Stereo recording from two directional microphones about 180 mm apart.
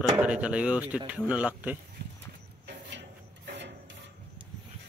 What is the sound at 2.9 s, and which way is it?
Rub, 75° right (ahead or behind).